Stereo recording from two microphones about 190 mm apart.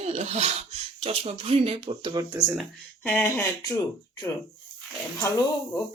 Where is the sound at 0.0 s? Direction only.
35° right (ahead or behind).